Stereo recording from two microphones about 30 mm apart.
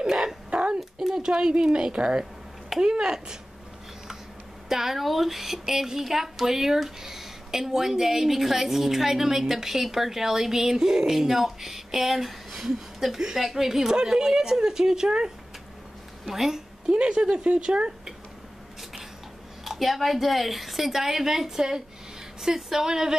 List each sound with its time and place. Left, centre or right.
0.5 s a sound: right
0.7 s a sound: centre
1.6 s a woman's voice: right
4.6 s a woman's voice: centre
16.3 s a woman's voice: centre
16.9 s speech: right
19.6 s speech: centre